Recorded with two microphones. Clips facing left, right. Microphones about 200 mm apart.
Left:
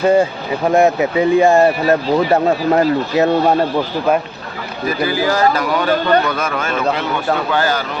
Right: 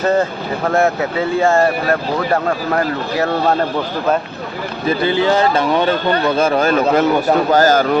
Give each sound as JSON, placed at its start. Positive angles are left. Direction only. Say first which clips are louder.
{"t": 0.0, "sound": "speech", "louder": "left 3 dB", "side_deg": 10}
{"t": 4.9, "sound": "a man's voice", "louder": "right 2 dB", "side_deg": -25}